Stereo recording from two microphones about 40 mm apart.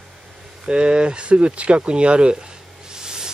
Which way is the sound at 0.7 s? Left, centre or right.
Right.